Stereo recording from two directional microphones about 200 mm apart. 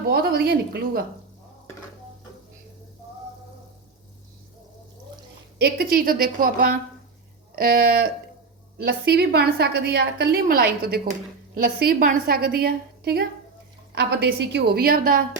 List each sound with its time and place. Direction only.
0.1 s a woman's voice: 50° right (ahead or behind)
5.5 s a woman's voice: 50° right (ahead or behind)